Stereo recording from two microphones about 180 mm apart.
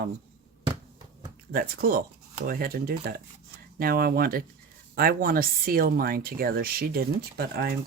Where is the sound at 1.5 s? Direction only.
55° right (ahead or behind).